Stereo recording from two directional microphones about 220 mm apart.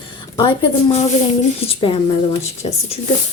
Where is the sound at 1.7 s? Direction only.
25° left (ahead or behind).